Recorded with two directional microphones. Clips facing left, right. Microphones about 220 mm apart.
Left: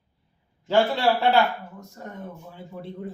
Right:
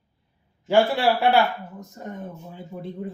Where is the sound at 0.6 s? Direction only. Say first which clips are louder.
Right 2 dB; 15° right (ahead or behind).